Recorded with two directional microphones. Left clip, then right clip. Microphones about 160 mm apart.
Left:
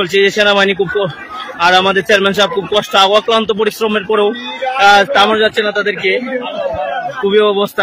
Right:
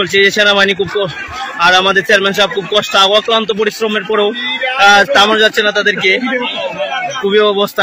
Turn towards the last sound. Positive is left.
turn(degrees=15)  # may be behind; listen again after turning